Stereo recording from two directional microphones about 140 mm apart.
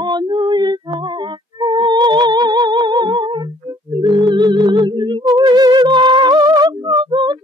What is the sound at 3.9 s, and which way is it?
Music, 35° right (ahead or behind).